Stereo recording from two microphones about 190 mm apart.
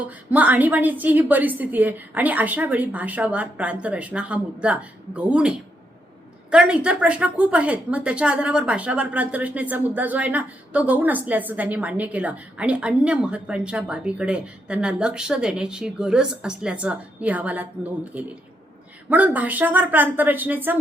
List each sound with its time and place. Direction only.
0.0 s a woman's voice: 10° right (ahead or behind)